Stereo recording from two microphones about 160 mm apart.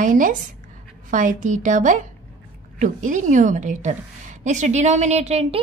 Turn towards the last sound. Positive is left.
turn(degrees=-40)  # may be behind; listen again after turning